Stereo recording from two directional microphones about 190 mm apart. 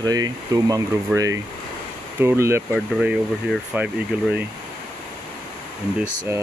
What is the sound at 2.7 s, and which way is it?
Speech, centre (ahead or behind).